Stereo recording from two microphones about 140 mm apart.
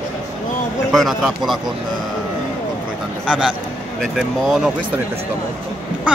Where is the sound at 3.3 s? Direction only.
5° right (ahead or behind).